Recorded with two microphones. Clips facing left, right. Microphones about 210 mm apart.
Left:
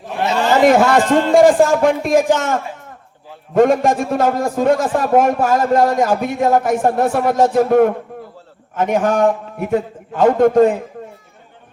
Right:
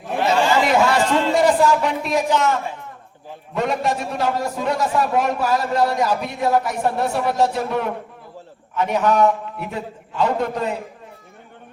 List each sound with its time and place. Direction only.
0.6 s a man's voice: 50° left (ahead or behind)